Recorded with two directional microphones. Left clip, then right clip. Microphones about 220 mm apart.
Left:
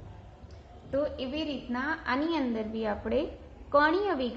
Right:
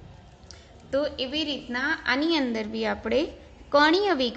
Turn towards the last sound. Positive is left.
turn(degrees=-45)  # may be behind; listen again after turning